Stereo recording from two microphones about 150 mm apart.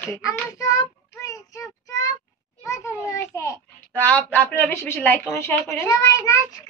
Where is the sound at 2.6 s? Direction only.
20° left (ahead or behind).